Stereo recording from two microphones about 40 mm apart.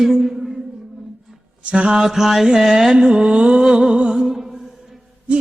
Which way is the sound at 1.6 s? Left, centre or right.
Right.